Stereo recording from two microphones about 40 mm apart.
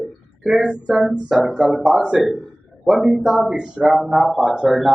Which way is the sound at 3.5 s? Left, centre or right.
Centre.